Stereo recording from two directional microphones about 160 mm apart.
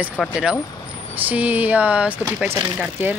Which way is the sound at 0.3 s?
5° right (ahead or behind).